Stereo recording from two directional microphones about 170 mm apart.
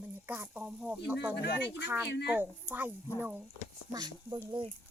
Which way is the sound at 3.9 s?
25° right (ahead or behind).